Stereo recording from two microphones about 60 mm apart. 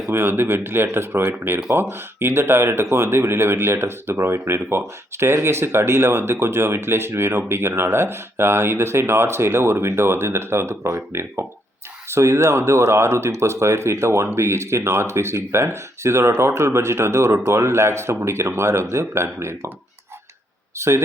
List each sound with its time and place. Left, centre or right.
0.1 s speech: right
20.7 s speech: right